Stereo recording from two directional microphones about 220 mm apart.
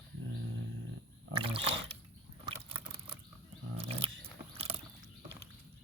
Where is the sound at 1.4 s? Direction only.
25° right (ahead or behind).